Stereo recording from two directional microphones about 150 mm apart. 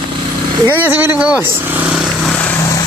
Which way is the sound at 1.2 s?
10° right (ahead or behind).